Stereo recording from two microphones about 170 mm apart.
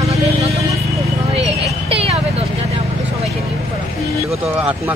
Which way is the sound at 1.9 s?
35° right (ahead or behind).